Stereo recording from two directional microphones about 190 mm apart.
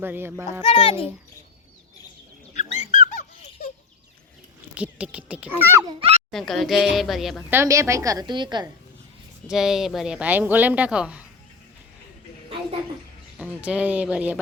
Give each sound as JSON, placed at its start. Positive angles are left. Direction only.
{"t": 0.0, "sound": "a woman's voice", "side_deg": -10}
{"t": 0.6, "sound": "a child's voice", "side_deg": 30}
{"t": 2.9, "sound": "laughter", "side_deg": 40}
{"t": 4.7, "sound": "a woman's voice", "side_deg": -5}
{"t": 6.0, "sound": "a sound", "side_deg": -35}
{"t": 6.3, "sound": "speech", "side_deg": 0}
{"t": 7.5, "sound": "a woman's voice", "side_deg": -15}
{"t": 9.5, "sound": "speech", "side_deg": 0}
{"t": 13.4, "sound": "a woman's voice", "side_deg": -5}